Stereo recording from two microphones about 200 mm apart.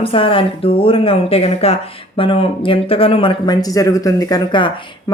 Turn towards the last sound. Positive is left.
turn(degrees=20)  # may be behind; listen again after turning